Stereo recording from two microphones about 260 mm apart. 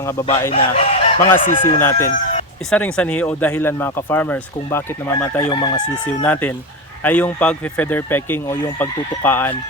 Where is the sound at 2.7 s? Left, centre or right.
Centre.